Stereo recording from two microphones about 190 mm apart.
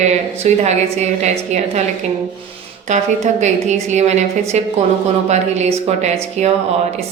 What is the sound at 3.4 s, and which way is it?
A woman's voice, 35° right (ahead or behind).